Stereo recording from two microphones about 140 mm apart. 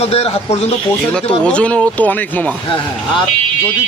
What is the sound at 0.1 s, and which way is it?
Speech, 45° left (ahead or behind).